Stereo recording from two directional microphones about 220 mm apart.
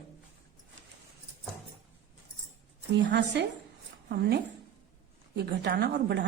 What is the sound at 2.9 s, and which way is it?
A woman's voice, 50° right (ahead or behind).